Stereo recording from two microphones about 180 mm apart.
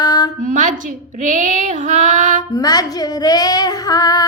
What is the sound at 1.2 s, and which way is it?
Female singing, 45° right (ahead or behind).